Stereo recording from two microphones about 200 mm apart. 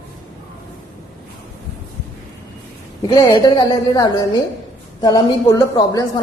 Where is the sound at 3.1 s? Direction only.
25° left (ahead or behind).